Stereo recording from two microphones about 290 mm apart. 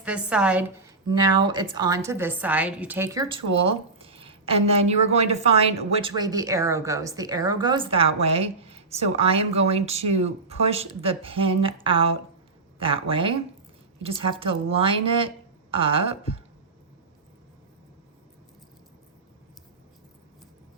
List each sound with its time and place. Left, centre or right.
0.0 s a woman's voice: centre
1.0 s a woman's voice: centre